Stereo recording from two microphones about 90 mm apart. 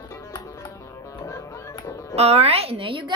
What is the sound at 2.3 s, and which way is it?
Speech, 90° right.